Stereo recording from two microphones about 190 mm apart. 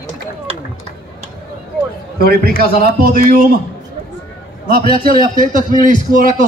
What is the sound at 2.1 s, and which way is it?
A man's voice, 50° right (ahead or behind).